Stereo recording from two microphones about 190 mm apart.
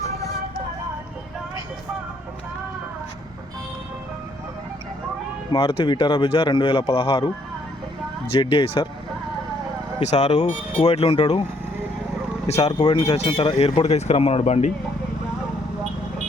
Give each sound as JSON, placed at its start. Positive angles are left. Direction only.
{"t": 5.5, "sound": "a man's voice", "side_deg": 30}
{"t": 8.3, "sound": "a man's voice", "side_deg": 25}
{"t": 10.0, "sound": "speech", "side_deg": 35}
{"t": 12.5, "sound": "speech", "side_deg": 35}
{"t": 12.8, "sound": "speech", "side_deg": 25}